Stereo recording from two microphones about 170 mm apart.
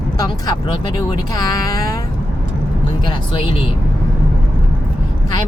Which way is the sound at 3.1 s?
30° left (ahead or behind).